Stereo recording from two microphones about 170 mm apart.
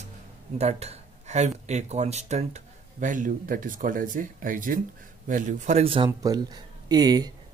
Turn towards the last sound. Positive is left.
turn(degrees=-25)  # may be behind; listen again after turning